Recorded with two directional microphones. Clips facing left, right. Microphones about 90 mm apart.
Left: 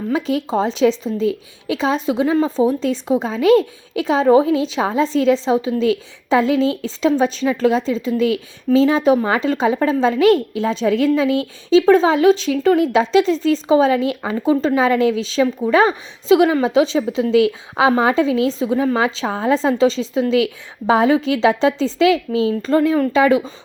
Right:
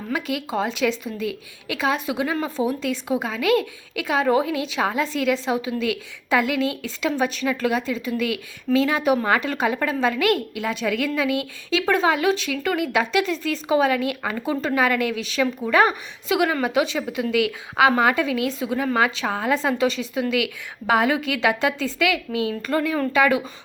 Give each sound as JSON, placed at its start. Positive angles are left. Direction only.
{"t": 0.1, "sound": "a woman's voice", "side_deg": 30}